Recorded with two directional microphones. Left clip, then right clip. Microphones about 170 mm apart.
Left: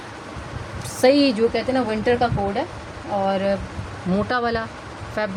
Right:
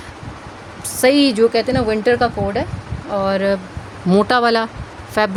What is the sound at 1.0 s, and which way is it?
Speech, 35° right (ahead or behind).